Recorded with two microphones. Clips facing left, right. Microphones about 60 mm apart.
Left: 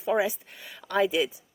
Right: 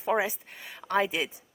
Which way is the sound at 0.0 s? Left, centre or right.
Right.